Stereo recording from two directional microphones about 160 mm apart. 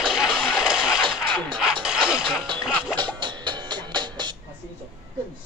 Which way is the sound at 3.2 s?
30° right (ahead or behind).